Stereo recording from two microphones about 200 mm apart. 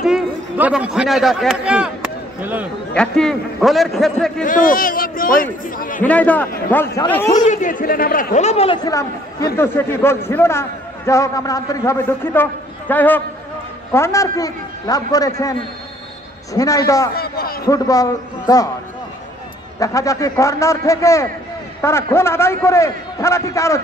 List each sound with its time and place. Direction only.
0.0 s a man's voice: 5° right (ahead or behind)
2.9 s speech: 5° left (ahead or behind)
4.4 s speech: 40° left (ahead or behind)
5.9 s a man's voice: 5° left (ahead or behind)
7.3 s a man's voice: 35° left (ahead or behind); by 15.5 s 15° left (ahead or behind)
16.5 s a man's voice: 15° left (ahead or behind)
17.1 s speech: 50° left (ahead or behind)
17.6 s a man's voice: 15° left (ahead or behind)
19.8 s a man's voice: 15° left (ahead or behind)